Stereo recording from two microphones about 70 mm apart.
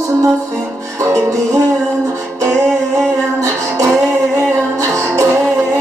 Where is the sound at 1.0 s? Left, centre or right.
Right.